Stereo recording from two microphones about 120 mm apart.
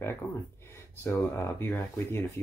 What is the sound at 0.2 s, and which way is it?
Speech, 20° left (ahead or behind).